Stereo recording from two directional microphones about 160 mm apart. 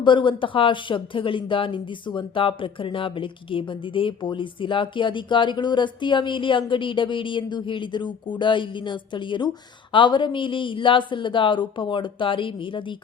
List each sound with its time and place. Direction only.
0.0 s speech: 30° left (ahead or behind)